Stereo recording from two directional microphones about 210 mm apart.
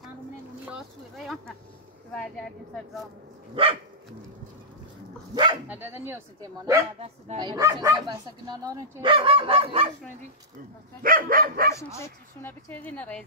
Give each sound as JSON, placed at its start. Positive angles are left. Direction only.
{"t": 0.7, "sound": "a woman's voice", "side_deg": 0}
{"t": 5.3, "sound": "speech", "side_deg": -20}
{"t": 5.7, "sound": "speech", "side_deg": -10}
{"t": 11.0, "sound": "speech", "side_deg": -45}
{"t": 11.7, "sound": "speech", "side_deg": 10}